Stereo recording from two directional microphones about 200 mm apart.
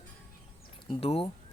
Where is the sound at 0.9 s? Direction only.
30° left (ahead or behind).